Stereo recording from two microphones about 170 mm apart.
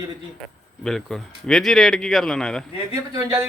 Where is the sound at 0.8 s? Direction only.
Centre (ahead or behind).